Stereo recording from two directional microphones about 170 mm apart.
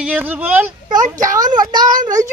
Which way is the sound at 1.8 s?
50° right (ahead or behind).